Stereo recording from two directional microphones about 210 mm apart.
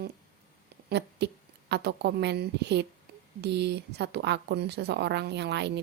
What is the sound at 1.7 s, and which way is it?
A woman's voice, 50° right (ahead or behind).